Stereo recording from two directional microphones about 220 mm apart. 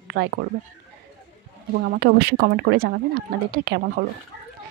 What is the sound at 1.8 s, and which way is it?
Speech, 45° right (ahead or behind).